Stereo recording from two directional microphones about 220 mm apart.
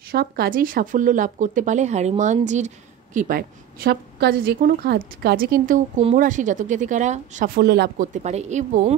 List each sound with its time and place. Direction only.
0.1 s speech: 45° right (ahead or behind)